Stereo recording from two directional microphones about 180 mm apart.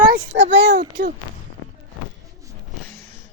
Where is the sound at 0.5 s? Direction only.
70° right (ahead or behind).